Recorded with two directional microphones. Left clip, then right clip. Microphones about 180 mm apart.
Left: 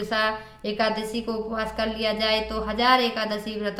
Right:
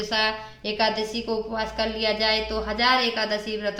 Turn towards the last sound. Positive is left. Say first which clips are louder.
# right 2 dB
turn(degrees=45)  # may be behind; listen again after turning